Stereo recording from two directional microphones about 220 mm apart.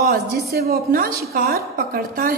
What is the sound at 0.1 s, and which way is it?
A woman's voice, 45° right (ahead or behind).